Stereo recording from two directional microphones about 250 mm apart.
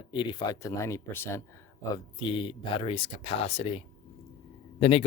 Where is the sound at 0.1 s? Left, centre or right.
Centre.